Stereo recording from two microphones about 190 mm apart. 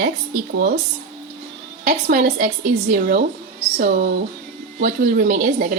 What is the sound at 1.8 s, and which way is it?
A woman's voice, 50° right (ahead or behind).